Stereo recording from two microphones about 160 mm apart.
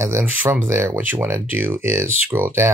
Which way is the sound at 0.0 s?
15° right (ahead or behind).